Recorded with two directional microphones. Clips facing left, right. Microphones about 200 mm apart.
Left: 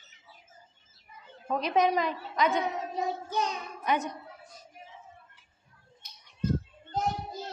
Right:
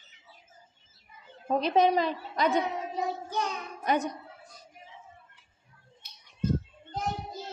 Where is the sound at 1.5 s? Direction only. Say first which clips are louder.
Right 2 dB; 30° right (ahead or behind).